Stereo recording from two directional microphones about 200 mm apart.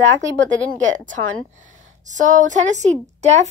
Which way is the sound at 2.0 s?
40° right (ahead or behind).